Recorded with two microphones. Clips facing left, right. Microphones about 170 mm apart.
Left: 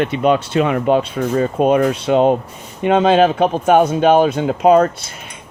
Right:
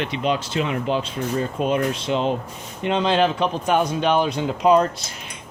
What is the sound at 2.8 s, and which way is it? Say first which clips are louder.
Speech: left 7 dB; 55° left (ahead or behind).